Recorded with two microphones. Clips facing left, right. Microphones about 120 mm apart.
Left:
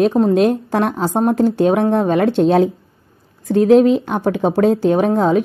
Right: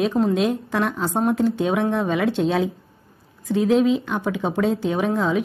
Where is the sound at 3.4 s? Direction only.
70° left (ahead or behind).